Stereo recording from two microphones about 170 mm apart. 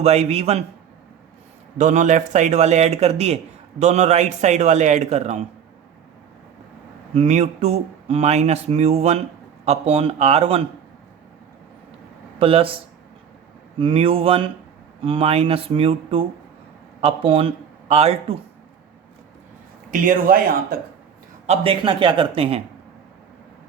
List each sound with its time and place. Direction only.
0.0 s speech: 40° right (ahead or behind)
1.8 s a man's voice: 45° right (ahead or behind)
7.1 s speech: 40° right (ahead or behind)
12.4 s speech: 30° right (ahead or behind)
13.7 s a man's voice: 30° right (ahead or behind)
19.9 s speech: 50° right (ahead or behind)
21.4 s speech: 35° right (ahead or behind)